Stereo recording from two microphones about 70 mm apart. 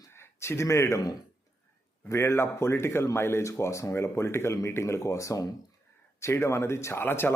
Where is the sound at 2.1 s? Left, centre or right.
Left.